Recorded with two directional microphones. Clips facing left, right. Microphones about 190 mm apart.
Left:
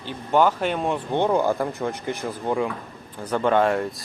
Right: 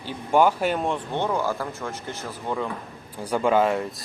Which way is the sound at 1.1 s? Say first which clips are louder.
Left 8 dB; 15° left (ahead or behind).